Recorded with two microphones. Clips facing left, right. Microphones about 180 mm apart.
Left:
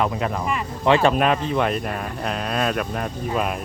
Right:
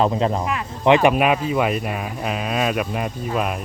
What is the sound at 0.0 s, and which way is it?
Speech, 25° right (ahead or behind).